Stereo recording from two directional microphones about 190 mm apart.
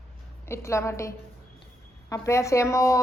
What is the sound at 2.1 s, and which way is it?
Speech, 15° left (ahead or behind).